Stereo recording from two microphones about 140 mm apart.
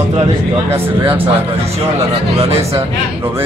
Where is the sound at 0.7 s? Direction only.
15° right (ahead or behind).